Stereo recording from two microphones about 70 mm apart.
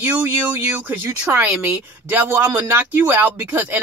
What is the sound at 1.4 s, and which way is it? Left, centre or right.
Speech, right.